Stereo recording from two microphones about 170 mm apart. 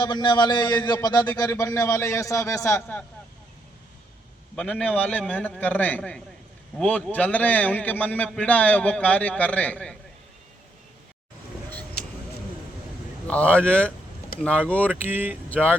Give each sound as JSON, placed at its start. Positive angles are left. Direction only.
{"t": 0.0, "sound": "a man's voice", "side_deg": 25}
{"t": 4.5, "sound": "a man's voice", "side_deg": 5}
{"t": 13.2, "sound": "a man's voice", "side_deg": 5}
{"t": 15.1, "sound": "speech", "side_deg": -10}
{"t": 15.4, "sound": "speech", "side_deg": 10}